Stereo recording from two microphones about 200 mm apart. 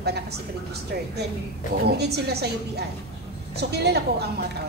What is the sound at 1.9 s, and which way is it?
A woman's voice, 55° right (ahead or behind).